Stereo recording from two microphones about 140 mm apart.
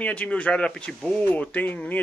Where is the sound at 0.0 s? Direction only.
10° left (ahead or behind).